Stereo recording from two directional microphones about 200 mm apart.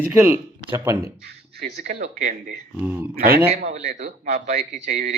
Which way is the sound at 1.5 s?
50° right (ahead or behind).